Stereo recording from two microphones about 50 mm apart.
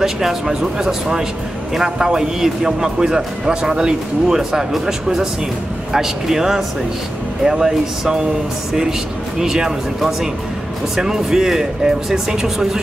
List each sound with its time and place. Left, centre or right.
0.0 s a man's voice: centre
9.4 s a man's voice: centre